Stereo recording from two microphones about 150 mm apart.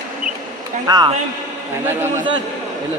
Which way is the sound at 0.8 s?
25° right (ahead or behind).